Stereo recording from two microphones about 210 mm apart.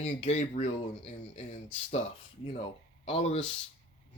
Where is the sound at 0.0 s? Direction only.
30° left (ahead or behind).